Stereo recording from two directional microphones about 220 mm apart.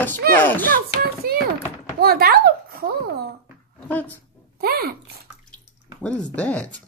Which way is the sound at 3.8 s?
5° left (ahead or behind).